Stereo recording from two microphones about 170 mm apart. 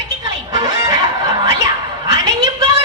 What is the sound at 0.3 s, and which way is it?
Music, 25° right (ahead or behind).